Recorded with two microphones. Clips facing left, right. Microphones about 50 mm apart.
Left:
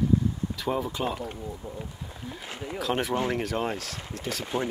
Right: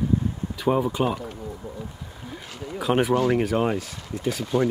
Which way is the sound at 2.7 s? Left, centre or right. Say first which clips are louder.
Right 6 dB; centre.